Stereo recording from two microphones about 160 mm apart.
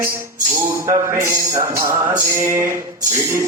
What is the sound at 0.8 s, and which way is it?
Speech, 20° right (ahead or behind).